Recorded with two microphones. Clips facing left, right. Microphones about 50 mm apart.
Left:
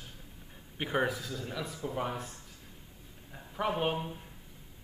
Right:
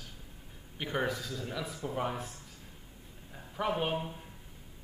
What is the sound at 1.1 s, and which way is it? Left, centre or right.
Speech, centre.